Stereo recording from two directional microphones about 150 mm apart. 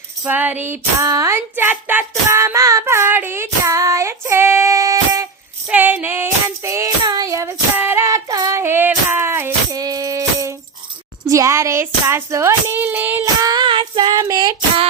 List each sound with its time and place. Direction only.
0.3 s a sound: 10° right (ahead or behind)
5.6 s child singing: 10° right (ahead or behind)
11.3 s speech: 20° right (ahead or behind)
13.4 s female singing: 30° right (ahead or behind)